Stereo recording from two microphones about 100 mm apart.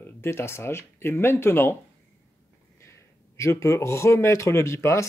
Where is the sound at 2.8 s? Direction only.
30° left (ahead or behind).